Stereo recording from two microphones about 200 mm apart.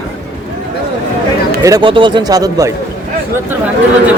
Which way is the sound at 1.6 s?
20° right (ahead or behind).